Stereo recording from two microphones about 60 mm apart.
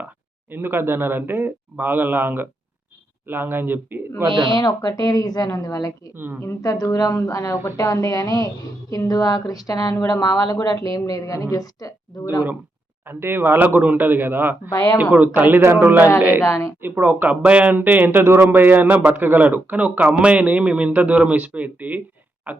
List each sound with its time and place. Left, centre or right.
0.5 s a man's voice: right
4.8 s a woman's voice: left
6.1 s a man's voice: right
6.6 s a woman's voice: left
13.1 s a man's voice: right
14.7 s speech: left
15.1 s a man's voice: right
16.4 s a woman's voice: left
16.8 s a man's voice: right